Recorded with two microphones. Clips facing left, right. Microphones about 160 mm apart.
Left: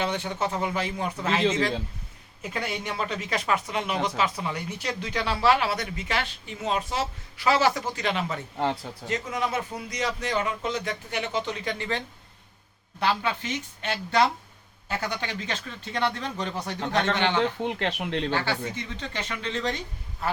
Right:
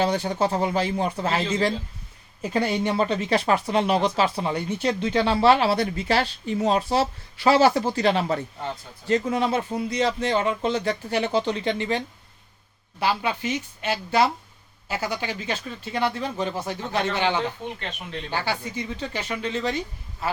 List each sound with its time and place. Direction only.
0.0 s speech: 35° right (ahead or behind)
8.5 s speech: 75° left (ahead or behind)
9.0 s a man's voice: 30° right (ahead or behind); by 17.4 s 10° right (ahead or behind)
17.6 s speech: 90° left
18.3 s speech: 10° right (ahead or behind)